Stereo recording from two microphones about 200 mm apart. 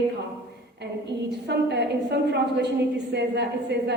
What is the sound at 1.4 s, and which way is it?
A woman's voice, 55° right (ahead or behind).